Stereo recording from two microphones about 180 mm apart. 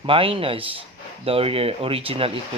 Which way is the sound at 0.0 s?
30° right (ahead or behind).